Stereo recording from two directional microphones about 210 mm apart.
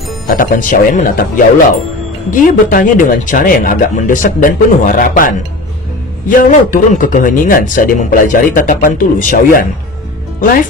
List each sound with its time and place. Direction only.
0.3 s a man's voice: 40° left (ahead or behind)